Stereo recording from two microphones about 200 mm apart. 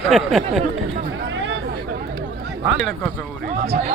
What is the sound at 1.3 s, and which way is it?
Chatter, 65° right (ahead or behind).